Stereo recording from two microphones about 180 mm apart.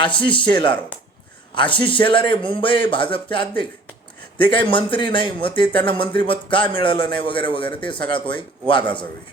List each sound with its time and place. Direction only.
0.0 s speech: 25° left (ahead or behind)